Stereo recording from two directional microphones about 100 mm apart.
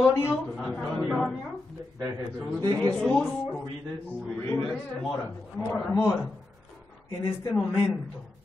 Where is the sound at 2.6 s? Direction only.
40° right (ahead or behind).